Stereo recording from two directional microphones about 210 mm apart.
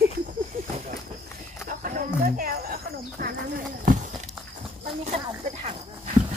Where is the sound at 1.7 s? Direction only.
40° right (ahead or behind).